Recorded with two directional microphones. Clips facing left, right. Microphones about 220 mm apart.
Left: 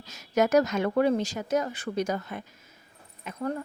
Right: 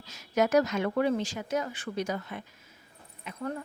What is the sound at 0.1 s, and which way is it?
Speech, 45° left (ahead or behind).